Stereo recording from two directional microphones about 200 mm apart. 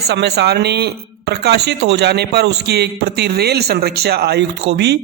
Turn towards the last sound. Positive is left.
turn(degrees=-55)  # may be behind; listen again after turning